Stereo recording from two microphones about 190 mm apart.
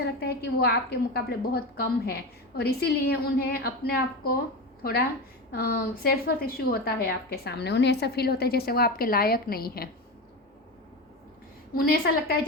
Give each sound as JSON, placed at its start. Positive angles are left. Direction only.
{"t": 0.0, "sound": "a woman's voice", "side_deg": 60}
{"t": 11.7, "sound": "a woman's voice", "side_deg": 50}